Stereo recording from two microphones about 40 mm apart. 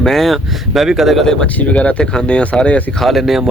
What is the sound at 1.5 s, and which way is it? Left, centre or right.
Speech, left.